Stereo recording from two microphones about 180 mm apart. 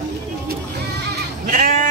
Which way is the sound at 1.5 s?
50° right (ahead or behind).